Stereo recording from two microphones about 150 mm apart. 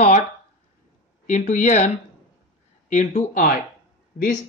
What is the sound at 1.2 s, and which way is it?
Speech, 55° left (ahead or behind).